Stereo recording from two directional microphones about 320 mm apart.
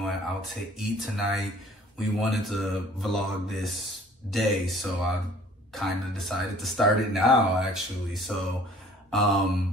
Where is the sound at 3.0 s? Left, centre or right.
Centre.